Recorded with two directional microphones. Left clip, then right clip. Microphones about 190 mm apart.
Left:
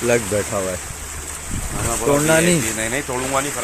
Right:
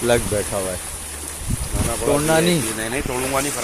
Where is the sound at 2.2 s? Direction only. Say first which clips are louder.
Left 2 dB; 10° left (ahead or behind).